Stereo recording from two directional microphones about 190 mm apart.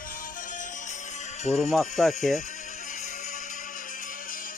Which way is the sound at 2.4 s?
40° left (ahead or behind).